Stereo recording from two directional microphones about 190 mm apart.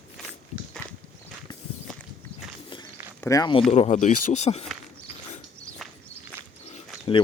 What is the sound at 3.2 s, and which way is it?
Speech, 20° left (ahead or behind).